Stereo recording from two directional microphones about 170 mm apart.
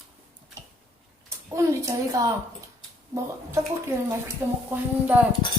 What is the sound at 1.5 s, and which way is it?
Speech, 20° right (ahead or behind).